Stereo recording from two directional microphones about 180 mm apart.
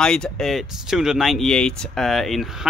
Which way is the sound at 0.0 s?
5° left (ahead or behind).